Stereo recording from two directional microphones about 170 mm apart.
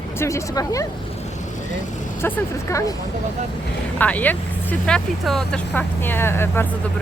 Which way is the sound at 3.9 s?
10° left (ahead or behind).